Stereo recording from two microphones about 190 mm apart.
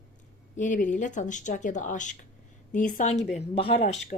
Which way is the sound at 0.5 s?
40° left (ahead or behind).